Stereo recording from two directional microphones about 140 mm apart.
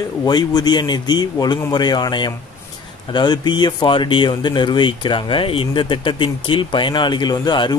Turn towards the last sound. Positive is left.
turn(degrees=30)  # may be behind; listen again after turning